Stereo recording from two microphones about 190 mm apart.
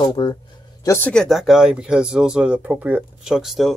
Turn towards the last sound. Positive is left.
turn(degrees=0)  # may be behind; listen again after turning